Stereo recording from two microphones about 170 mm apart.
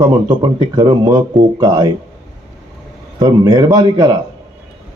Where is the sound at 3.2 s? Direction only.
20° right (ahead or behind).